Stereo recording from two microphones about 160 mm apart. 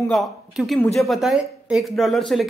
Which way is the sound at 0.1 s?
Centre (ahead or behind).